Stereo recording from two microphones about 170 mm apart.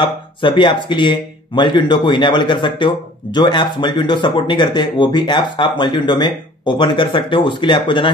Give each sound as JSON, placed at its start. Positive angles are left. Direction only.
{"t": 0.0, "sound": "speech", "side_deg": 30}